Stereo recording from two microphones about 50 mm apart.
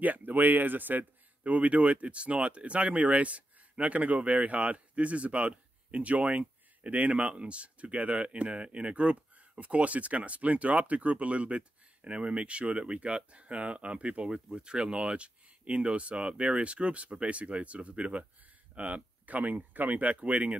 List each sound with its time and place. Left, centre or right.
0.0 s speech: right